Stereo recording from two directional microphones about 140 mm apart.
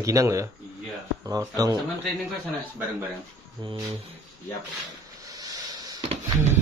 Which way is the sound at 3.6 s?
30° right (ahead or behind).